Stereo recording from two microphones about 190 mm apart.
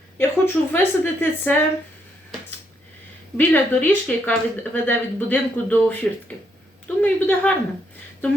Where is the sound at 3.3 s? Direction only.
10° left (ahead or behind).